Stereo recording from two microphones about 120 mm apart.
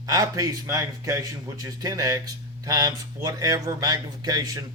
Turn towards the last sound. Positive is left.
turn(degrees=-30)  # may be behind; listen again after turning